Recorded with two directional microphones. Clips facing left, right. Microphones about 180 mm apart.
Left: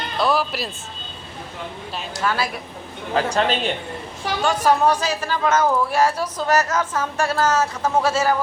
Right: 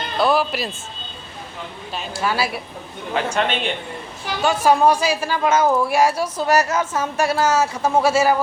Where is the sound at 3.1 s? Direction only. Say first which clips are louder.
Left 1 dB; 35° left (ahead or behind).